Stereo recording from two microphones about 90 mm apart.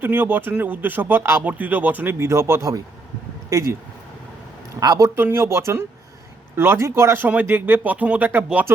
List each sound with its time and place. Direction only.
0.0 s speech: 25° right (ahead or behind)
4.8 s speech: 40° right (ahead or behind); by 8.6 s 20° right (ahead or behind)